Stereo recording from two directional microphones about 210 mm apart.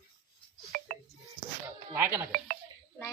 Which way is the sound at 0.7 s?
40° right (ahead or behind).